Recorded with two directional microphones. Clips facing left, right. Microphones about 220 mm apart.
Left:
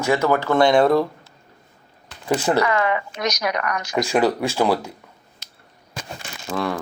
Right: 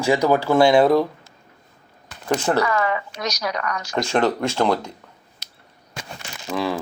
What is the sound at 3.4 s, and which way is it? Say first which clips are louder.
Speech: left 2 dB; 60° left (ahead or behind).